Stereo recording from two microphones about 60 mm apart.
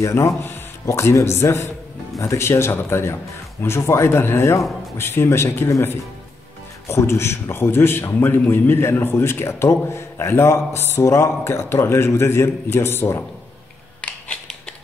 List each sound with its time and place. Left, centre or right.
0.0 s a man's voice: left
6.9 s a man's voice: left
14.0 s a sound: left